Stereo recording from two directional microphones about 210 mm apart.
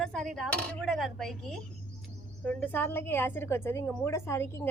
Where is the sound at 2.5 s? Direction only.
5° left (ahead or behind).